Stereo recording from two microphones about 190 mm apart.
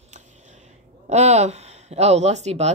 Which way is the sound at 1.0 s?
35° right (ahead or behind).